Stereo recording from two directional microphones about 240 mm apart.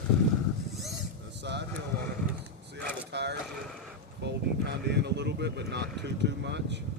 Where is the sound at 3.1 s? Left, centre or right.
Right.